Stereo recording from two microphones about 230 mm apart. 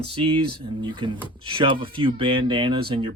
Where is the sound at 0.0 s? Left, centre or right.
Right.